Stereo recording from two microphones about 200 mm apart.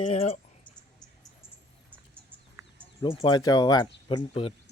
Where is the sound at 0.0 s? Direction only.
30° left (ahead or behind).